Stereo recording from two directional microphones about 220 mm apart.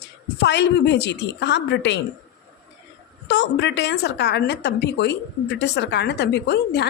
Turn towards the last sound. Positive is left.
turn(degrees=50)  # may be behind; listen again after turning